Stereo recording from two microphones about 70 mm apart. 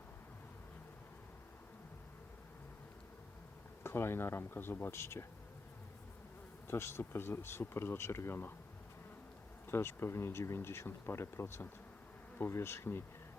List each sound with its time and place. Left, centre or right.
3.8 s speech: left
6.7 s speech: left
9.6 s speech: left